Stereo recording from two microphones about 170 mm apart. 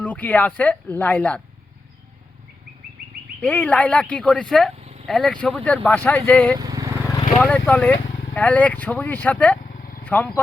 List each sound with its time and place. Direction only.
0.0 s speech: 10° left (ahead or behind)
3.4 s speech: 10° left (ahead or behind)
6.6 s vehicle: 20° right (ahead or behind)
7.3 s speech: 10° left (ahead or behind)
9.6 s vehicle: 55° left (ahead or behind)
10.0 s speech: 10° left (ahead or behind)